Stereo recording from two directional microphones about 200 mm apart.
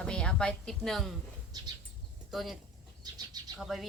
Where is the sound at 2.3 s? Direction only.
Centre (ahead or behind).